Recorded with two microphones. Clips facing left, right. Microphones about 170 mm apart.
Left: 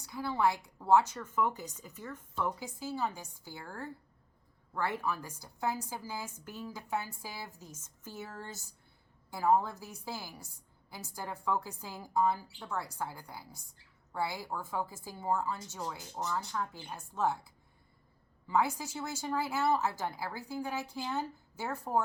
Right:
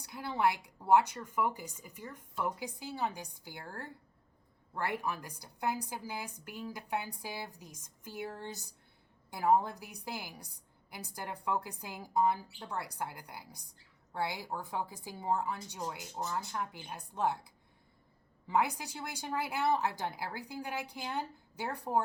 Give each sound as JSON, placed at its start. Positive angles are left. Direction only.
{"t": 0.0, "sound": "a woman's voice", "side_deg": -15}
{"t": 4.7, "sound": "a woman's voice", "side_deg": -15}
{"t": 18.8, "sound": "a woman's voice", "side_deg": -15}